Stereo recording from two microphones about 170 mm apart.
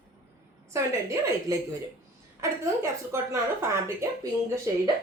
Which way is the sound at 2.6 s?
15° right (ahead or behind).